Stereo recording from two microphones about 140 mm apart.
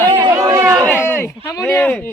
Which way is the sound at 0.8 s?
15° left (ahead or behind).